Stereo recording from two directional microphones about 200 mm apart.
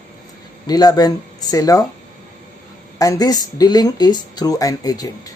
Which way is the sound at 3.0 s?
20° left (ahead or behind).